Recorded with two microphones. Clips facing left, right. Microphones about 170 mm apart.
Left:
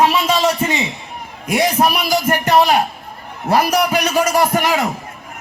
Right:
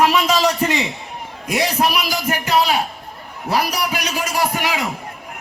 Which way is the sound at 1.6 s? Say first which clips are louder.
Left 3 dB; 45° left (ahead or behind).